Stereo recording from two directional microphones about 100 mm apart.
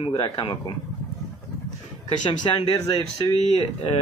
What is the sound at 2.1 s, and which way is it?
Speech, 50° left (ahead or behind).